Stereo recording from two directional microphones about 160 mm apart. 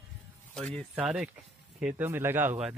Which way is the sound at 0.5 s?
5° left (ahead or behind).